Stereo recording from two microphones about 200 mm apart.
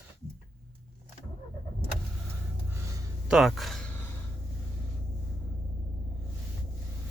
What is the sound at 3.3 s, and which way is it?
Speech, centre (ahead or behind).